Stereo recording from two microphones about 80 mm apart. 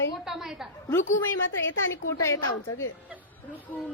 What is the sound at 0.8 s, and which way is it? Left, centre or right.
Speech, left.